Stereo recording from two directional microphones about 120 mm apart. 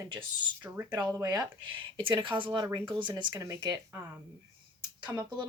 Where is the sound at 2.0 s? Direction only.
40° right (ahead or behind).